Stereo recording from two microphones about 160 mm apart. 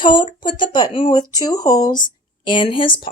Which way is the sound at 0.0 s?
30° left (ahead or behind).